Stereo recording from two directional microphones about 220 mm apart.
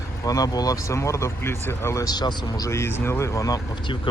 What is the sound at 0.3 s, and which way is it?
Speech, 15° left (ahead or behind).